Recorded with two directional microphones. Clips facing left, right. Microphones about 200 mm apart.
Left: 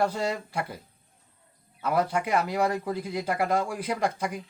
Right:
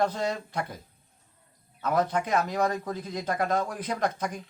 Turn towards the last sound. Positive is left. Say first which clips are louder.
# left 1 dB
turn(degrees=10)  # may be behind; listen again after turning